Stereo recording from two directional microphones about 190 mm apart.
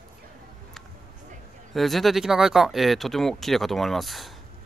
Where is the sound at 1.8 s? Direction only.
Centre (ahead or behind).